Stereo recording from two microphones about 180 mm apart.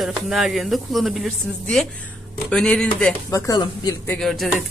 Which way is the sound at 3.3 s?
20° left (ahead or behind).